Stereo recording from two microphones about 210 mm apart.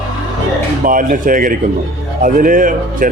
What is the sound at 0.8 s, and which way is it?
Speech, 40° right (ahead or behind).